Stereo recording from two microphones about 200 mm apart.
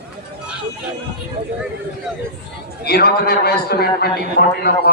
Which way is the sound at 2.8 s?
50° left (ahead or behind).